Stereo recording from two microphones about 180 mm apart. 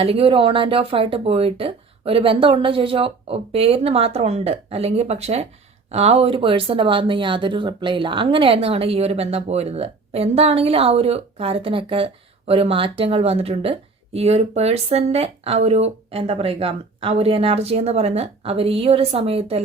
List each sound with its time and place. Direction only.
0.0 s speech: 30° right (ahead or behind)